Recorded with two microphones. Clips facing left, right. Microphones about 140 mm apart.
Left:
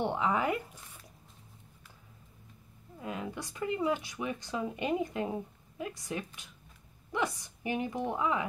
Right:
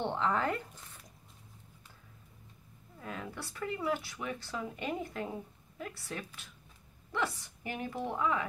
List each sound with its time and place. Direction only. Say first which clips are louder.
0.0 s speech: left 2 dB; 10° left (ahead or behind)
3.0 s speech: left 4 dB; 15° left (ahead or behind)